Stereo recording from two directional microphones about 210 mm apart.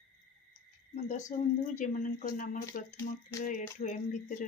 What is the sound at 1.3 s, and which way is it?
Speech, 40° left (ahead or behind).